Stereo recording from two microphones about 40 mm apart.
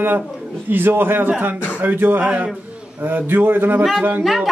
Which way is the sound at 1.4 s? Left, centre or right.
Right.